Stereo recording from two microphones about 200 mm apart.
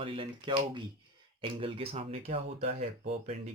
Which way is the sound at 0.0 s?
25° right (ahead or behind).